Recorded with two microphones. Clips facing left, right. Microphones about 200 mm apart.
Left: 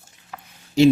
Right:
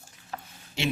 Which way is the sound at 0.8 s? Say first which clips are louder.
Left 16 dB; 40° left (ahead or behind).